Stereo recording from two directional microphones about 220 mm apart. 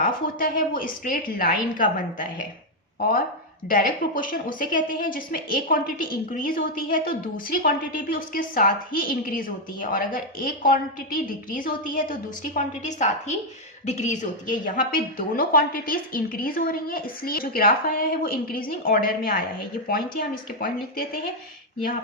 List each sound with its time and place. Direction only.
0.0 s a woman's voice: 40° left (ahead or behind)
3.7 s a woman's voice: 40° left (ahead or behind)